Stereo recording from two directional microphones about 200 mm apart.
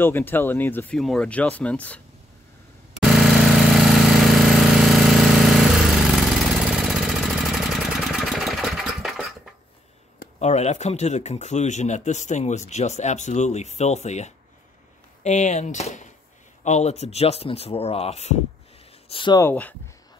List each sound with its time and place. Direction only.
0.0 s speech: 10° left (ahead or behind)
3.0 s jackhammer: centre (ahead or behind)
6.8 s engine: centre (ahead or behind)
10.4 s speech: 35° left (ahead or behind)
19.4 s speech: 10° left (ahead or behind)